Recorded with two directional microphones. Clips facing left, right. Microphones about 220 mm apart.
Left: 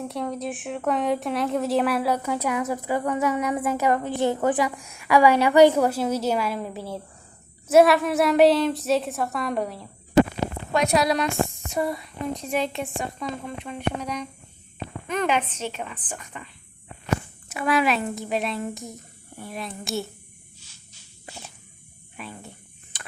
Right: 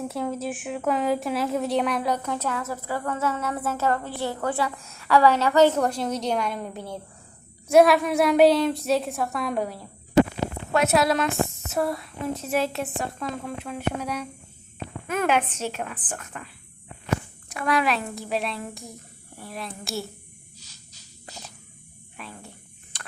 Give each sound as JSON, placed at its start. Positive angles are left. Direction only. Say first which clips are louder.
{"t": 0.0, "sound": "a woman's voice", "louder": "right 1 dB", "side_deg": -5}
{"t": 17.5, "sound": "a woman's voice", "louder": "left 2 dB", "side_deg": 5}
{"t": 20.6, "sound": "a sound", "louder": "right 2 dB", "side_deg": -40}
{"t": 22.2, "sound": "insect", "louder": "left 3 dB", "side_deg": 0}